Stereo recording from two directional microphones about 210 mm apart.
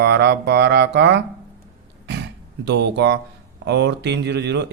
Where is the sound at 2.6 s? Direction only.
55° right (ahead or behind).